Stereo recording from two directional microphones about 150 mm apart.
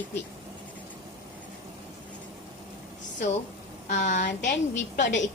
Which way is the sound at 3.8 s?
55° left (ahead or behind).